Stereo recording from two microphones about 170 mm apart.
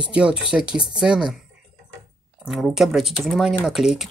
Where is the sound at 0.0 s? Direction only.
5° right (ahead or behind).